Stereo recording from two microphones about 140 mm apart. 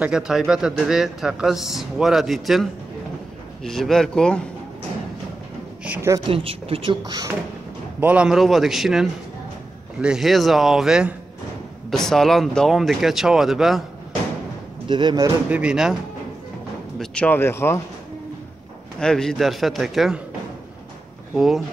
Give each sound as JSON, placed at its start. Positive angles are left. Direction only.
{"t": 0.0, "sound": "a man's voice", "side_deg": -5}
{"t": 6.2, "sound": "speech", "side_deg": -40}
{"t": 8.0, "sound": "a man's voice", "side_deg": -10}
{"t": 14.9, "sound": "speech", "side_deg": -35}
{"t": 15.5, "sound": "a man's voice", "side_deg": -5}
{"t": 17.0, "sound": "speech", "side_deg": 10}
{"t": 18.9, "sound": "a man's voice", "side_deg": 5}
{"t": 21.4, "sound": "a man's voice", "side_deg": 0}